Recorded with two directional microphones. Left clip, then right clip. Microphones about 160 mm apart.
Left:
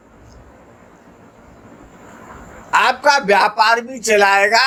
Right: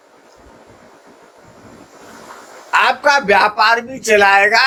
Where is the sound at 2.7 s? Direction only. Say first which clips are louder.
Right 1 dB; 40° left (ahead or behind).